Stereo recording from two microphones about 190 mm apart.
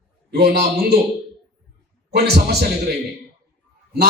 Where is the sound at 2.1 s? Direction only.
55° right (ahead or behind).